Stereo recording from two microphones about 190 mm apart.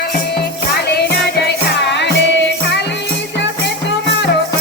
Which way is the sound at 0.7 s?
60° left (ahead or behind).